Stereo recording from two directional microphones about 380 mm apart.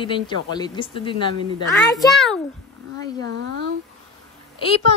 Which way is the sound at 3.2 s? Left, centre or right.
Right.